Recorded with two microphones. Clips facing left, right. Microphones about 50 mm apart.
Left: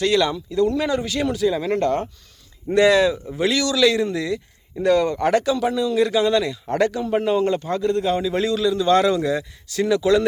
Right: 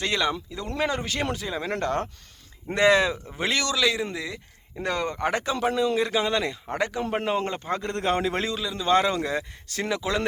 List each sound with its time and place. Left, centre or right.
0.0 s a man's voice: right
0.7 s a man's voice: right
2.7 s a man's voice: right
3.8 s a man's voice: centre
5.5 s a man's voice: right
6.7 s speech: centre
7.1 s a man's voice: right
8.4 s a man's voice: right
9.9 s a man's voice: right